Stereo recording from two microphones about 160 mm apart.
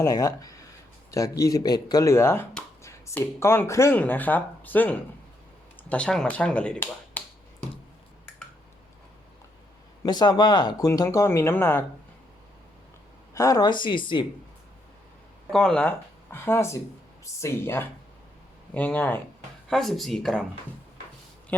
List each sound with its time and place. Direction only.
0.0 s speech: 20° left (ahead or behind)
10.0 s speech: 25° left (ahead or behind)
13.3 s speech: 20° left (ahead or behind)
15.4 s speech: 5° left (ahead or behind)